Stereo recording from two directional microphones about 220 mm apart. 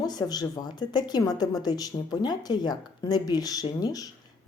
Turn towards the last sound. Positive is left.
turn(degrees=15)  # may be behind; listen again after turning